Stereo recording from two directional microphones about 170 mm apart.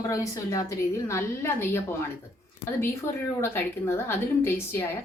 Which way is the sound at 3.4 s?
15° left (ahead or behind).